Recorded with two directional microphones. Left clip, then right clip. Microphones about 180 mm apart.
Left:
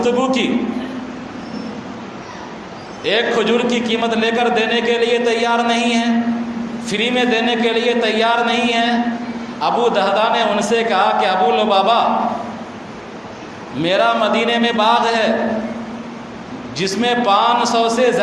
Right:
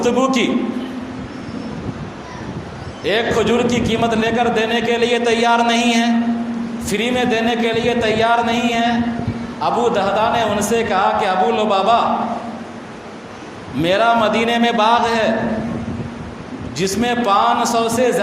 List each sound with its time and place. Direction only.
0.0 s a man's voice: 35° right (ahead or behind)
3.0 s a man's voice: 30° right (ahead or behind)
13.8 s a man's voice: 35° right (ahead or behind)
16.7 s a man's voice: 30° right (ahead or behind)